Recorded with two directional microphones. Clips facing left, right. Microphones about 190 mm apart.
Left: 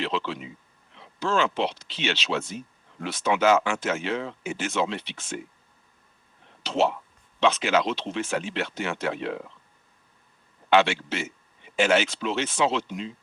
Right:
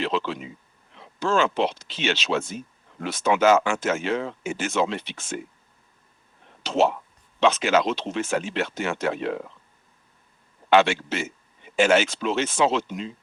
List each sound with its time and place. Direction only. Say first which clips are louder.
0.0 s speech: right 3 dB; 45° right (ahead or behind)
6.6 s speech: right 3 dB; 45° right (ahead or behind)
10.7 s speech: right 2 dB; 45° right (ahead or behind)